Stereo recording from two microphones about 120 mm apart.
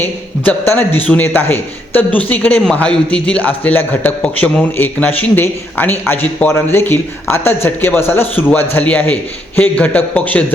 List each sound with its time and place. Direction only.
0.4 s a man's voice: 15° left (ahead or behind)